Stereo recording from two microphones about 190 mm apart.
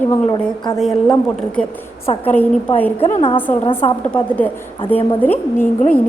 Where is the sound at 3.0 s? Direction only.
30° left (ahead or behind).